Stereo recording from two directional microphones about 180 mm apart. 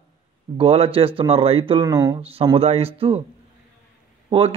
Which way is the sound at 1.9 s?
15° right (ahead or behind).